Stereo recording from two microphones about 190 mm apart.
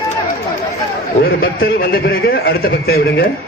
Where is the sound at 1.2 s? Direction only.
55° left (ahead or behind).